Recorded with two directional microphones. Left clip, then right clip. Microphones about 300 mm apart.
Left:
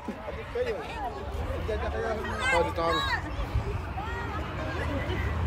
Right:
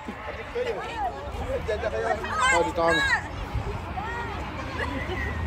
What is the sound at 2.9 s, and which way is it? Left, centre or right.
Speech, right.